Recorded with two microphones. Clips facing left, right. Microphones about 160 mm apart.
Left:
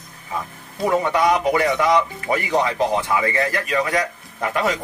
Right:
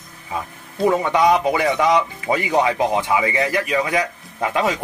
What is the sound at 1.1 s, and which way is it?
A man's voice, 20° right (ahead or behind).